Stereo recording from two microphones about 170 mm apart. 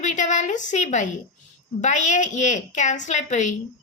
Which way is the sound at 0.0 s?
45° left (ahead or behind).